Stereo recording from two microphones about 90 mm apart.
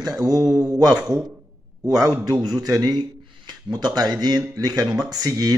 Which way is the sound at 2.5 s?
45° right (ahead or behind).